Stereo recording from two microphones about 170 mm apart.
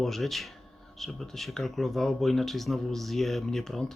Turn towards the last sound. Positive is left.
turn(degrees=0)  # may be behind; listen again after turning